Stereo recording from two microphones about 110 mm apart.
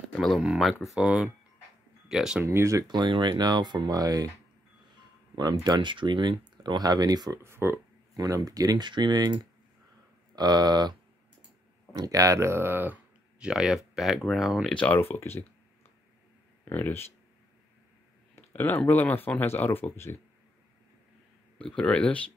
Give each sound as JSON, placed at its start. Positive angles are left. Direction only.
{"t": 0.4, "sound": "speech", "side_deg": -5}
{"t": 2.4, "sound": "speech", "side_deg": -25}
{"t": 2.9, "sound": "speech", "side_deg": -40}
{"t": 5.3, "sound": "speech", "side_deg": -40}
{"t": 7.5, "sound": "speech", "side_deg": -20}
{"t": 8.2, "sound": "speech", "side_deg": -35}
{"t": 14.7, "sound": "speech", "side_deg": 10}
{"t": 16.6, "sound": "speech", "side_deg": 20}
{"t": 18.3, "sound": "a sound", "side_deg": 20}
{"t": 18.9, "sound": "speech", "side_deg": 15}
{"t": 21.5, "sound": "speech", "side_deg": 5}